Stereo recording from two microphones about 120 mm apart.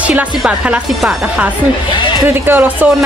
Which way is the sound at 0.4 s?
5° right (ahead or behind).